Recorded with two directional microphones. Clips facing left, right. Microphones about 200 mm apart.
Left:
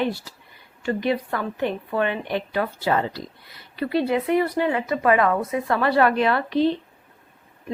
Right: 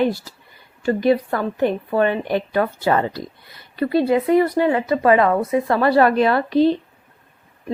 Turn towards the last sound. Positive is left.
turn(degrees=-40)  # may be behind; listen again after turning